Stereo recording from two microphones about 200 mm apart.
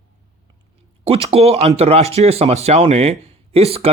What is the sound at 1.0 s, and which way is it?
Speech, 30° right (ahead or behind).